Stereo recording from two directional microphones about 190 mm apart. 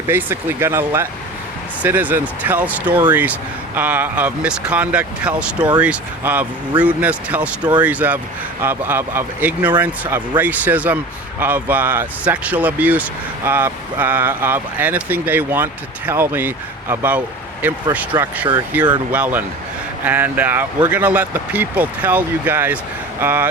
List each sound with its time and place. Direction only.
0.1 s speech: 10° right (ahead or behind)
18.1 s speech: 20° right (ahead or behind)
18.7 s speech: 10° right (ahead or behind)